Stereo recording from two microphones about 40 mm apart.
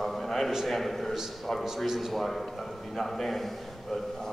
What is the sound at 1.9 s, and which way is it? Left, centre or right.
A man's voice, centre.